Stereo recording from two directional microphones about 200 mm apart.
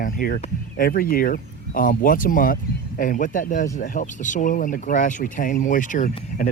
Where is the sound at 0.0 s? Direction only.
45° left (ahead or behind).